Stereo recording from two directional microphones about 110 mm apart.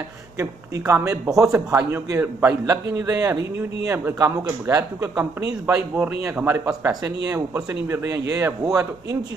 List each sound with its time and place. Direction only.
0.4 s speech: 25° right (ahead or behind)
6.9 s speech: 30° right (ahead or behind)